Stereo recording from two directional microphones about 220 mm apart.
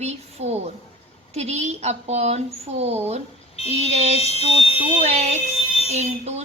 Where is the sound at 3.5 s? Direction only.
25° left (ahead or behind).